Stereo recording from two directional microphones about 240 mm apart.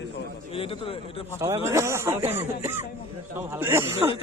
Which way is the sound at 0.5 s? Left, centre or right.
Left.